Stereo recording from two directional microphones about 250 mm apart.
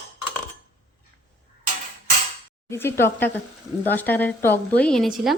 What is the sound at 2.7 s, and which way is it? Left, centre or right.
A woman's voice, centre.